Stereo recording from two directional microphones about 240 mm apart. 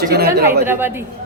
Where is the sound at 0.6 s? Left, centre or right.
Centre.